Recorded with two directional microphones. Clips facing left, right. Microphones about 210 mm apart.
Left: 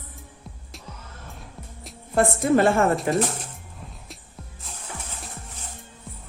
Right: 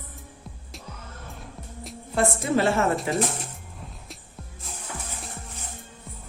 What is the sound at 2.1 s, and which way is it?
Speech, 50° left (ahead or behind).